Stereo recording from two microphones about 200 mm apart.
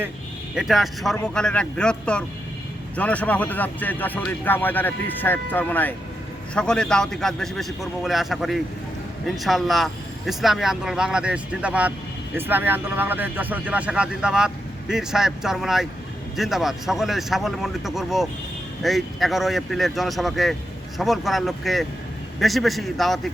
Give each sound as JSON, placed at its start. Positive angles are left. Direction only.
{"t": 0.5, "sound": "speech", "side_deg": 0}